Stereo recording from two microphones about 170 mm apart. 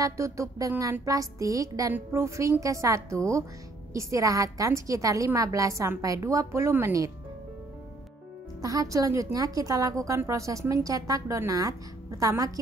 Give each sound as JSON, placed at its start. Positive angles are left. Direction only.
{"t": 0.0, "sound": "a woman's voice", "side_deg": -20}
{"t": 8.5, "sound": "a woman's voice", "side_deg": -20}